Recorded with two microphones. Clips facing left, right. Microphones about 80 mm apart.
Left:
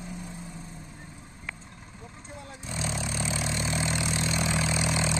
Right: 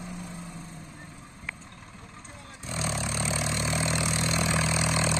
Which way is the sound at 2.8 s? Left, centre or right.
Centre.